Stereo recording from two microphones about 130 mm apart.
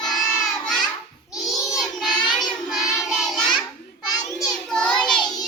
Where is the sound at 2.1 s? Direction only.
35° left (ahead or behind).